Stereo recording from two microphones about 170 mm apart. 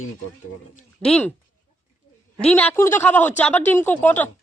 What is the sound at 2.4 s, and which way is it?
A woman's voice, 10° left (ahead or behind).